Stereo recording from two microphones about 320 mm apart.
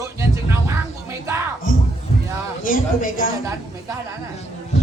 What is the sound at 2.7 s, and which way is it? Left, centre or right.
Speech, left.